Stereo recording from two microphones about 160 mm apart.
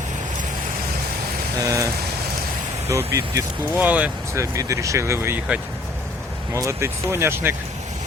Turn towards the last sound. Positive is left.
turn(degrees=-15)  # may be behind; listen again after turning